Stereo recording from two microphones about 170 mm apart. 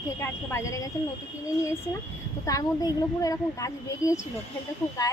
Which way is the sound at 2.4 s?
20° left (ahead or behind).